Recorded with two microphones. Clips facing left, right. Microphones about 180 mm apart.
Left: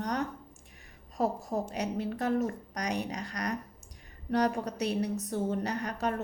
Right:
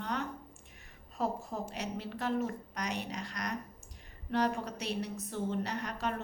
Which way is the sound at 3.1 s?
35° left (ahead or behind).